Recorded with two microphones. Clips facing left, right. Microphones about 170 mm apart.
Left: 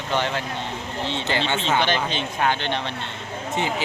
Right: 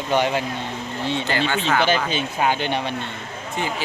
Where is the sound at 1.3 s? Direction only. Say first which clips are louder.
Even; 20° left (ahead or behind).